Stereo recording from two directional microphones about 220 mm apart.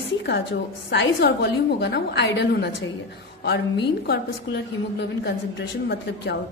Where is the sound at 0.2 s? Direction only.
50° left (ahead or behind).